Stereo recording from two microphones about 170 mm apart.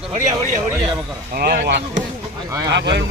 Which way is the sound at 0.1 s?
45° right (ahead or behind).